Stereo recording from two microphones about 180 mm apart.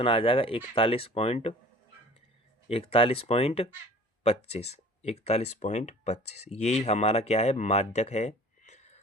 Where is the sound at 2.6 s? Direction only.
30° left (ahead or behind).